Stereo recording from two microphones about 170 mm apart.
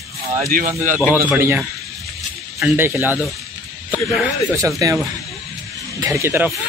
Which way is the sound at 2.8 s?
10° right (ahead or behind).